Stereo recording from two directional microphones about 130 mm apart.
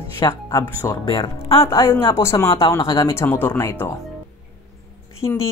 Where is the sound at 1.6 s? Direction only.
25° left (ahead or behind).